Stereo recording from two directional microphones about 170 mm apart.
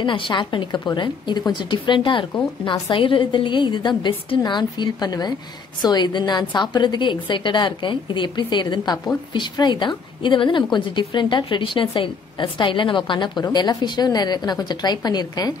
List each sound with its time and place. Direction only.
0.0 s a woman's voice: 30° left (ahead or behind)